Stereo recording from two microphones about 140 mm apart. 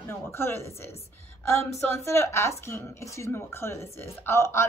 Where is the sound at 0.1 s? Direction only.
15° left (ahead or behind).